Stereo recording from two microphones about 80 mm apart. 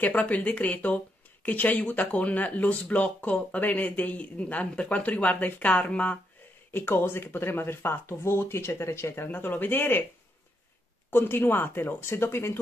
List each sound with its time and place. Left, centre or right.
0.0 s speech: centre
6.7 s speech: left
11.1 s speech: left